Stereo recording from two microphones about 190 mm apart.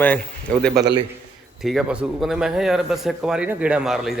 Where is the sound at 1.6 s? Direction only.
Centre (ahead or behind).